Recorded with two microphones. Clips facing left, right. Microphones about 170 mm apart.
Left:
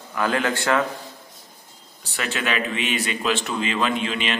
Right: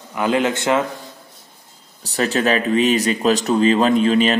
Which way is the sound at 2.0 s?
40° right (ahead or behind).